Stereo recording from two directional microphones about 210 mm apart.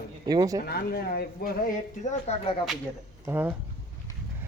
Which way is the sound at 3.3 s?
10° right (ahead or behind).